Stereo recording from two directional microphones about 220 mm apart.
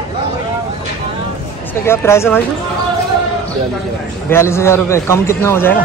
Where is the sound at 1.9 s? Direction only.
10° left (ahead or behind).